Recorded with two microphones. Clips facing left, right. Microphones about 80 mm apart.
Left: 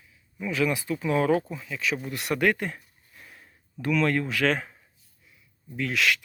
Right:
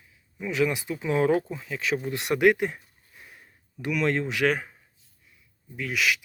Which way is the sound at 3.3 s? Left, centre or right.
Centre.